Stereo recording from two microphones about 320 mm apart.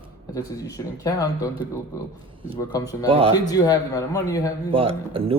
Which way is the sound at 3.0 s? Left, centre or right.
Centre.